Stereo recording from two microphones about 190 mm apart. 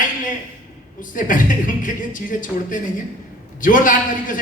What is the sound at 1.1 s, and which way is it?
A man's voice, 45° left (ahead or behind).